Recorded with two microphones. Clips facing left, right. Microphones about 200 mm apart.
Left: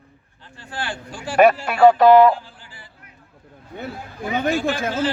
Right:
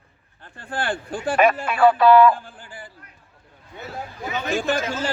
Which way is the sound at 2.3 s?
50° right (ahead or behind).